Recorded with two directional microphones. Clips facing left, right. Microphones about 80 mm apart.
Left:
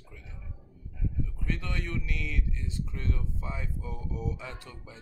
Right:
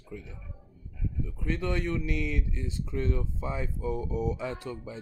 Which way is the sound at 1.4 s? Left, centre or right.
Right.